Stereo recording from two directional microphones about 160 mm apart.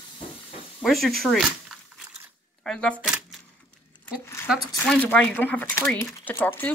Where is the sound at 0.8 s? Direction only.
Centre (ahead or behind).